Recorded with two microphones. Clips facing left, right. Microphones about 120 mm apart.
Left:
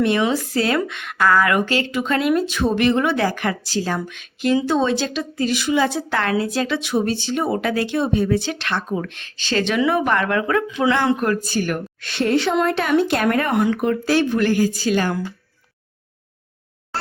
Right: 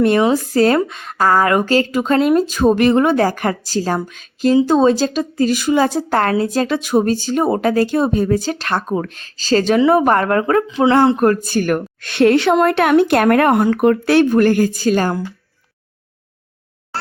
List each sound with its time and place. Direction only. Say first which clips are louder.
0.0 s a woman's voice: right 5 dB; 45° right (ahead or behind)
11.3 s speech: right 5 dB; 50° right (ahead or behind)